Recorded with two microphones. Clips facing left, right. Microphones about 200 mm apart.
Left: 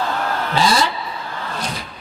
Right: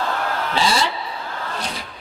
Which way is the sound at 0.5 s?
45° left (ahead or behind).